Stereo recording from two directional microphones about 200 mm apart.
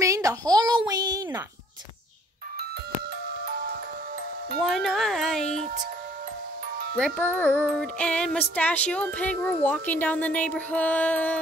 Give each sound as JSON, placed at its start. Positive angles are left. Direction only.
{"t": 0.0, "sound": "a sound", "side_deg": -15}
{"t": 3.4, "sound": "music", "side_deg": -50}
{"t": 4.6, "sound": "music", "side_deg": 0}
{"t": 7.0, "sound": "music", "side_deg": 5}